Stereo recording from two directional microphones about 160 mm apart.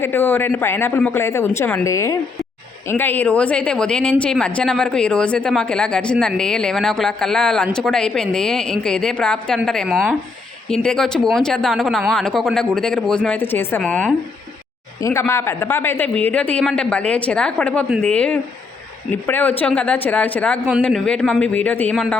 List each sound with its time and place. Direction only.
0.0 s a man's voice: 10° left (ahead or behind)
15.3 s a man's voice: 15° left (ahead or behind)